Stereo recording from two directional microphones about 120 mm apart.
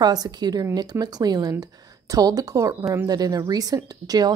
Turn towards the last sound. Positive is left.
turn(degrees=-30)  # may be behind; listen again after turning